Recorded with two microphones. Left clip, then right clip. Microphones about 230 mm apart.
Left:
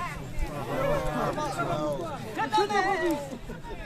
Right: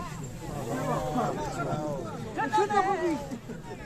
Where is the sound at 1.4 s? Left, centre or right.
Left.